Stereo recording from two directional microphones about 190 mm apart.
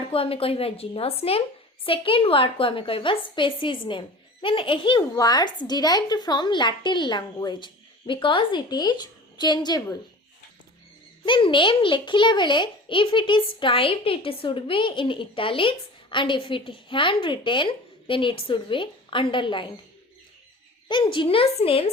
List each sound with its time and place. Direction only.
0.1 s a woman's voice: 30° left (ahead or behind)
11.3 s a woman's voice: 25° left (ahead or behind)
20.8 s a woman's voice: 25° left (ahead or behind)